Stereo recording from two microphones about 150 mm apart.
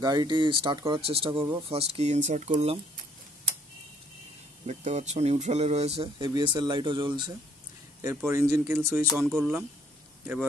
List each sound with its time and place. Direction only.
0.0 s speech: 25° right (ahead or behind); by 2.8 s 45° right (ahead or behind)
4.6 s speech: 50° right (ahead or behind)
6.1 s speech: 30° right (ahead or behind)
8.0 s speech: 15° right (ahead or behind)
9.2 s speech: centre (ahead or behind)